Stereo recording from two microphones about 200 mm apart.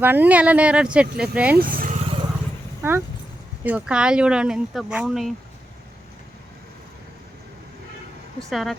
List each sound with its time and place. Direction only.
0.0 s speech: 10° right (ahead or behind)
1.5 s vehicle: 45° right (ahead or behind)
3.6 s speech: 10° right (ahead or behind)
8.4 s speech: centre (ahead or behind)